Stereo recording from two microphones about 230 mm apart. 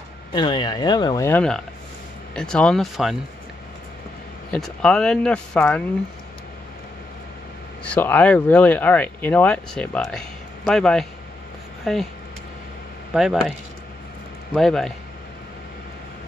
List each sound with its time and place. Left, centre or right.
0.3 s speech: centre
4.5 s speech: centre
7.8 s speech: centre
13.1 s speech: centre